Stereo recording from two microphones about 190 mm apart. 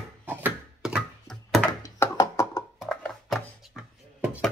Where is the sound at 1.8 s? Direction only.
15° left (ahead or behind).